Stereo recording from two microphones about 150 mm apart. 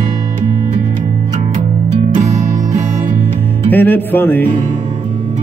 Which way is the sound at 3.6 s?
10° left (ahead or behind).